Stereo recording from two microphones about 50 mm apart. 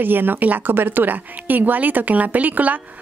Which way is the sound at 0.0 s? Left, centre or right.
Right.